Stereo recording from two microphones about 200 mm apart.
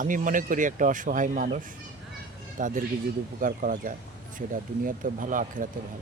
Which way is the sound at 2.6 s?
40° right (ahead or behind).